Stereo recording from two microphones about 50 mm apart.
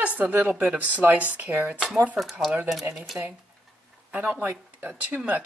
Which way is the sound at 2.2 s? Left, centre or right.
Centre.